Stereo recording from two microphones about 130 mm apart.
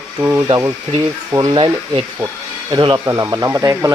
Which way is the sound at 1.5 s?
40° right (ahead or behind).